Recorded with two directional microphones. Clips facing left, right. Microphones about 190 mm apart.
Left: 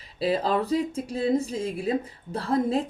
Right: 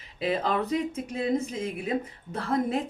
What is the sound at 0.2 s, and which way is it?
Speech, 35° left (ahead or behind).